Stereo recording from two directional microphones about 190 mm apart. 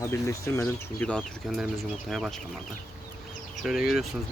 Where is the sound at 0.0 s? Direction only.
15° left (ahead or behind).